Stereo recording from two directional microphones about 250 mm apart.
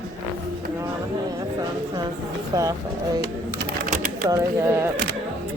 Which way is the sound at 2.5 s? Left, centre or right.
Centre.